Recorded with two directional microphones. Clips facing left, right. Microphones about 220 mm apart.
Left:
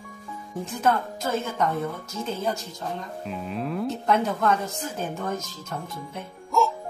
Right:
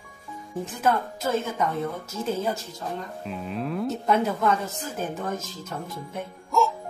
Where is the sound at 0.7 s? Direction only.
5° right (ahead or behind).